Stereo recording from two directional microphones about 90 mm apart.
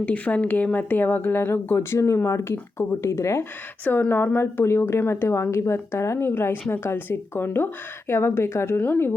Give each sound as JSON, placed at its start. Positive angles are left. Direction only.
{"t": 0.0, "sound": "a woman's voice", "side_deg": 15}
{"t": 3.8, "sound": "a woman's voice", "side_deg": 20}